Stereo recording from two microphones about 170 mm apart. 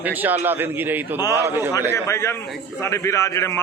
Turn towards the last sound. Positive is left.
turn(degrees=15)  # may be behind; listen again after turning